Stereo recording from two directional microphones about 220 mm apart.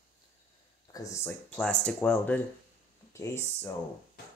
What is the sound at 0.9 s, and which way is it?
Speech, 10° left (ahead or behind).